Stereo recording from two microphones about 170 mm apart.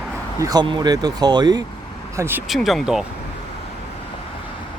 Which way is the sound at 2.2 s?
15° right (ahead or behind).